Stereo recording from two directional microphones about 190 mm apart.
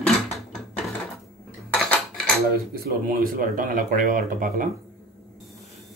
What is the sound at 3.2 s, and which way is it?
Speech, 45° right (ahead or behind).